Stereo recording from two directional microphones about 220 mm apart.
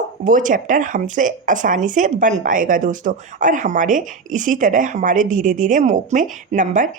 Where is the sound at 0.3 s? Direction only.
35° right (ahead or behind).